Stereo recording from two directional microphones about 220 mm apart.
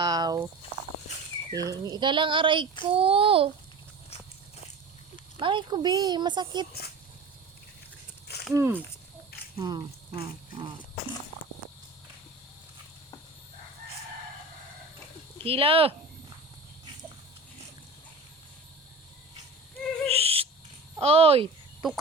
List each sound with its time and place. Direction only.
0.0 s a sound: 15° right (ahead or behind)
1.5 s speech: 15° right (ahead or behind)
5.4 s speech: 20° right (ahead or behind)
8.5 s speech: 10° right (ahead or behind)
9.6 s a sound: 20° right (ahead or behind)
15.4 s speech: 25° right (ahead or behind)
20.1 s owl: 25° right (ahead or behind)
21.0 s speech: 25° right (ahead or behind)